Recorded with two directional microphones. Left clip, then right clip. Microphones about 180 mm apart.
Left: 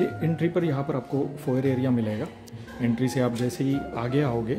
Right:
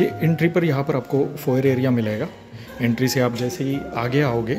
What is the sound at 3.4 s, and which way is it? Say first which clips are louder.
Speech: right 3 dB; 20° left (ahead or behind).